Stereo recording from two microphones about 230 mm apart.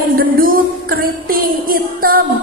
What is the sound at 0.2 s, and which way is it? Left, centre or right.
Music, right.